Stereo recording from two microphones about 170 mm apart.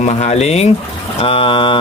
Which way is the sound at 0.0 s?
40° left (ahead or behind).